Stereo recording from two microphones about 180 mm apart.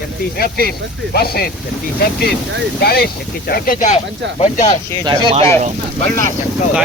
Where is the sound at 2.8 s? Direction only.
60° left (ahead or behind); by 4.8 s 40° left (ahead or behind).